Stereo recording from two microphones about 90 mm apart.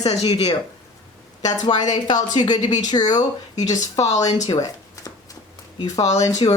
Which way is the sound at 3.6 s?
40° left (ahead or behind).